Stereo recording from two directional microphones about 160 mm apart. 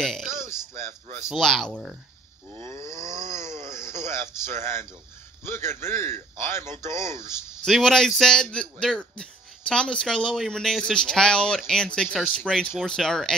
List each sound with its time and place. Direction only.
1.3 s a man's voice: 5° left (ahead or behind)
2.8 s snoring: 20° left (ahead or behind)
5.4 s a man's voice: 15° left (ahead or behind)
7.6 s a man's voice: 5° left (ahead or behind)